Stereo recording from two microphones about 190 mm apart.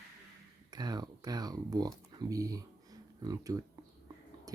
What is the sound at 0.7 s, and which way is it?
Speech, 20° right (ahead or behind).